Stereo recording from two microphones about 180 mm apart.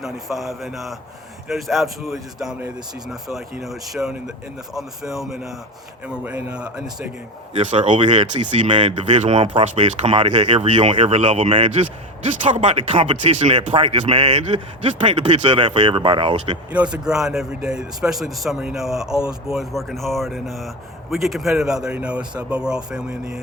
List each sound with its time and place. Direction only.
0.0 s a man's voice: centre (ahead or behind)
7.5 s speech: 40° right (ahead or behind)
16.7 s speech: 5° right (ahead or behind)